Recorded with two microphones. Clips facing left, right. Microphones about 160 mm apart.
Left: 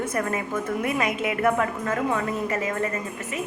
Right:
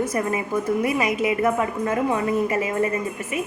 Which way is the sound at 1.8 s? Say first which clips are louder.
Right 3 dB; 20° right (ahead or behind).